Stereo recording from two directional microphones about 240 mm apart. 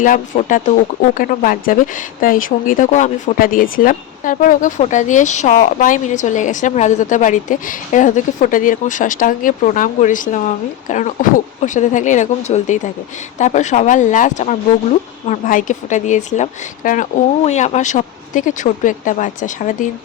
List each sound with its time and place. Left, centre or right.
0.0 s speech: left